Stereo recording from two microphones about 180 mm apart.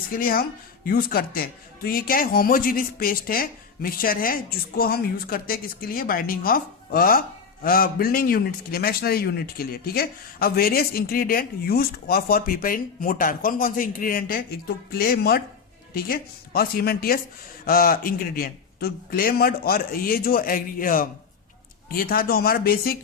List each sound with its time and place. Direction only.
0.1 s a man's voice: 55° left (ahead or behind)